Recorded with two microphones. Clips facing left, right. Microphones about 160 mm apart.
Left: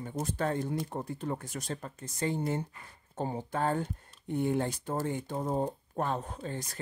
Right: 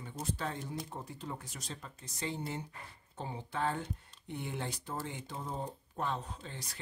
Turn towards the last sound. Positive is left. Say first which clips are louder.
# left 8 dB
turn(degrees=50)  # may be behind; listen again after turning